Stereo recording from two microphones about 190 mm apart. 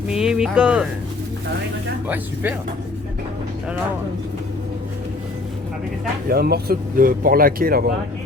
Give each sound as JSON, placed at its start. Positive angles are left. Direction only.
{"t": 0.1, "sound": "speech", "side_deg": -5}
{"t": 2.0, "sound": "speech", "side_deg": -10}
{"t": 6.2, "sound": "speech", "side_deg": -55}